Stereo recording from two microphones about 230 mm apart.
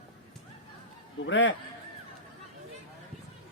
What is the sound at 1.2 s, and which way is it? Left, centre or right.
Speech, left.